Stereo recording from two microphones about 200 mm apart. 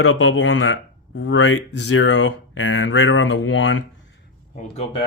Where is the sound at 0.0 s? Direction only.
75° left (ahead or behind).